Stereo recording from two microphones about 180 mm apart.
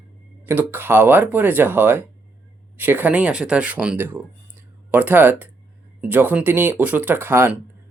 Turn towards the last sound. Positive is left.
turn(degrees=-10)  # may be behind; listen again after turning